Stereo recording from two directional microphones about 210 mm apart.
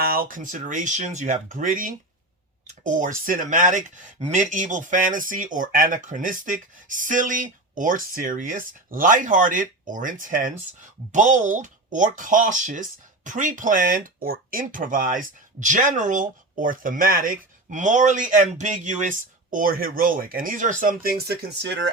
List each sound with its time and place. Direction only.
0.0 s speech: 45° right (ahead or behind)
3.2 s speech: 40° right (ahead or behind)